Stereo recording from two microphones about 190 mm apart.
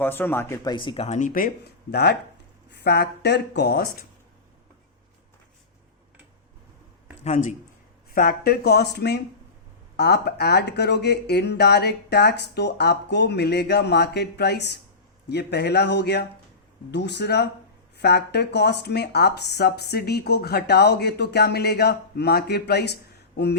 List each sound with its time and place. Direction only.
0.0 s speech: 10° left (ahead or behind); by 1.5 s 45° left (ahead or behind)
1.9 s speech: 60° left (ahead or behind)
7.3 s speech: 40° left (ahead or behind); by 23.6 s 60° left (ahead or behind)